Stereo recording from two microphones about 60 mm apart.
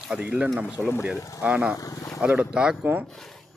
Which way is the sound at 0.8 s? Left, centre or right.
Left.